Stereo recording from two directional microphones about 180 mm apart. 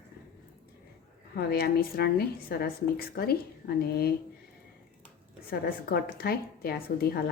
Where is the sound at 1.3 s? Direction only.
60° left (ahead or behind).